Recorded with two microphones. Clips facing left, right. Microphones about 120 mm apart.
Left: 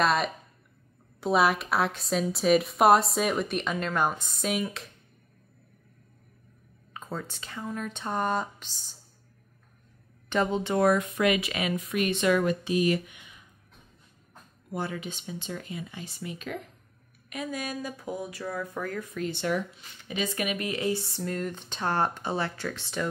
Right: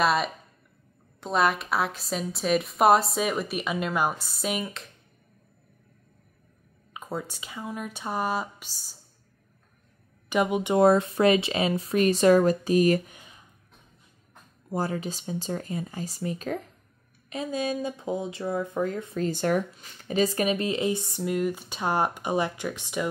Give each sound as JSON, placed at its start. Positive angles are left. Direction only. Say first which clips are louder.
{"t": 0.0, "sound": "speech", "louder": "right 1 dB", "side_deg": 0}
{"t": 6.9, "sound": "speech", "louder": "right 3 dB", "side_deg": -10}
{"t": 10.3, "sound": "speech", "louder": "right 3 dB", "side_deg": -10}
{"t": 14.7, "sound": "speech", "louder": "right 4 dB", "side_deg": -40}